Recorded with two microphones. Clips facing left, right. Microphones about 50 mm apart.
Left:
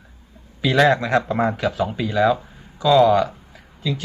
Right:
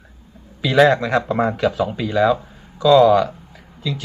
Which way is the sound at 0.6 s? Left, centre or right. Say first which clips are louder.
Right 2 dB; centre.